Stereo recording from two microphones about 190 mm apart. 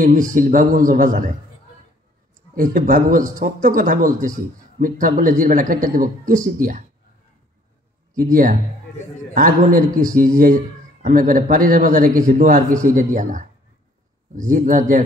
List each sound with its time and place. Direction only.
0.0 s speech: 45° right (ahead or behind)
2.5 s speech: 45° right (ahead or behind)
8.1 s speech: 45° right (ahead or behind)
8.9 s a man's voice: 65° left (ahead or behind)
9.3 s speech: 45° right (ahead or behind)